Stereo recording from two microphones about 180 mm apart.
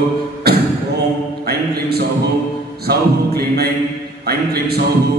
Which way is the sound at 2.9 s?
60° right (ahead or behind).